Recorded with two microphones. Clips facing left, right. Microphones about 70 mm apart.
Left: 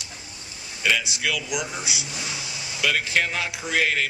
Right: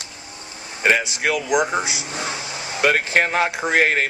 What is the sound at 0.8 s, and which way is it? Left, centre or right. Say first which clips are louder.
Speech: right 5 dB; right.